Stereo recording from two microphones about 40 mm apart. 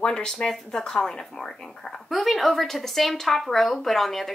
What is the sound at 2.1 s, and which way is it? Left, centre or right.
Speech, centre.